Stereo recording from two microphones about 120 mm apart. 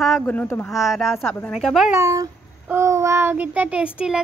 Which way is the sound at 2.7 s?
25° right (ahead or behind).